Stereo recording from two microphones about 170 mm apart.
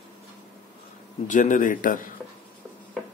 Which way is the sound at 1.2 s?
50° left (ahead or behind).